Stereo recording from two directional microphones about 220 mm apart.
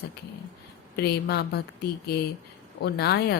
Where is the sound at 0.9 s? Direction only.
45° left (ahead or behind).